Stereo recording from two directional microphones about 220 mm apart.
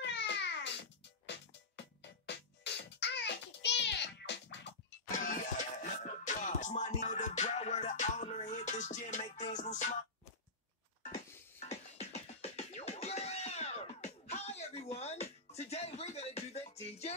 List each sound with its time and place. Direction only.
0.0 s a sound: 50° left (ahead or behind)
2.2 s music: 50° left (ahead or behind)
5.1 s music: 35° left (ahead or behind)
11.6 s music: 30° left (ahead or behind)